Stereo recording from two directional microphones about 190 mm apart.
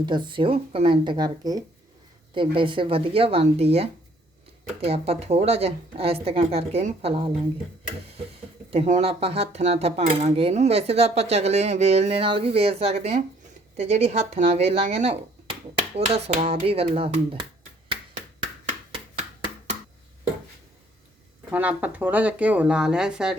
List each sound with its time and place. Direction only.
0.0 s speech: 25° right (ahead or behind)
4.8 s cutlery: 30° right (ahead or behind)
8.7 s cutlery: 35° right (ahead or behind)
21.5 s speech: 10° right (ahead or behind)